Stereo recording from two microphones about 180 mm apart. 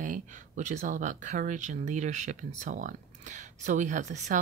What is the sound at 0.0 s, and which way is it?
Speech, 45° right (ahead or behind).